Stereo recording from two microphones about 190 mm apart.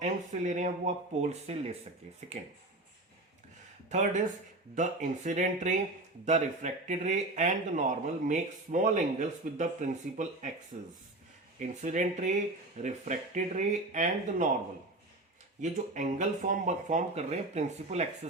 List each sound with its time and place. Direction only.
0.0 s speech: 40° right (ahead or behind)
3.8 s speech: 40° right (ahead or behind)
15.6 s speech: 40° right (ahead or behind)